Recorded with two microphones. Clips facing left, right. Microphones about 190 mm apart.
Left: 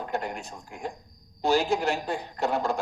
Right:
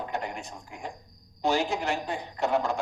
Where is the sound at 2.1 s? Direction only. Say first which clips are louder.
Right 1 dB; 35° left (ahead or behind).